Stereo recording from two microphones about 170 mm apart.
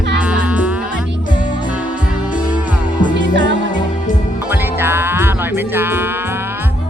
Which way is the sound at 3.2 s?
90° right.